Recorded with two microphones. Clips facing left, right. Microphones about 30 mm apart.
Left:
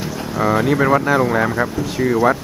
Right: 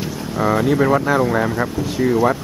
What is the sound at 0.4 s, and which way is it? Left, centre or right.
Speech, centre.